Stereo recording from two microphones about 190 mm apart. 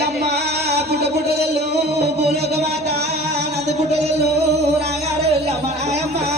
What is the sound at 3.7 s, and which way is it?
Music, 35° right (ahead or behind).